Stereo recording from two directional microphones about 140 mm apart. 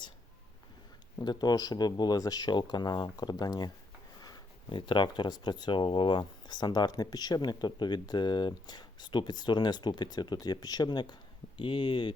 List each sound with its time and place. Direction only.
1.2 s speech: 30° left (ahead or behind)